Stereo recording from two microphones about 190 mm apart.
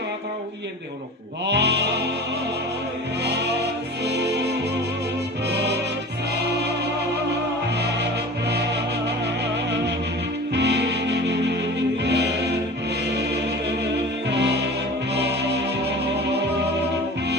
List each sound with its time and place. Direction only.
1.5 s music: 60° right (ahead or behind)
3.2 s music: 60° right (ahead or behind)
5.5 s music: 60° right (ahead or behind)
10.5 s music: 65° right (ahead or behind)
14.3 s music: 65° right (ahead or behind)